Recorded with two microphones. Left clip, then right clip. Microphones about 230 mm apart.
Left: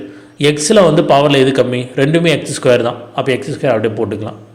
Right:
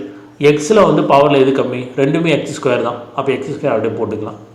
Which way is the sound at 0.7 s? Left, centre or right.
Left.